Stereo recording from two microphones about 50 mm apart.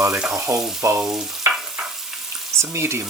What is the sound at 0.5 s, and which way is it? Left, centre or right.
Frying, right.